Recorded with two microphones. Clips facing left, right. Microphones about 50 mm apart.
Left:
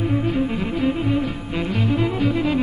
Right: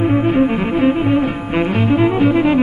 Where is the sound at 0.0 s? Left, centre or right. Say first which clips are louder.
Right 8 dB; right.